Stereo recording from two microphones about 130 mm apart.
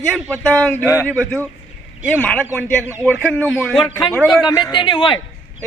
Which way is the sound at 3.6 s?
Centre (ahead or behind).